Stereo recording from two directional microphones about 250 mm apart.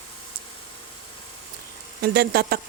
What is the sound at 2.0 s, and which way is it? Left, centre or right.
Speech, right.